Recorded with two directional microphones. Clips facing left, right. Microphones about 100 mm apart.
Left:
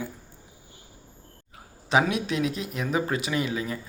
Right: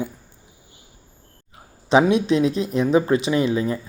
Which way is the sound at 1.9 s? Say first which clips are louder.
Right 7 dB; 25° right (ahead or behind).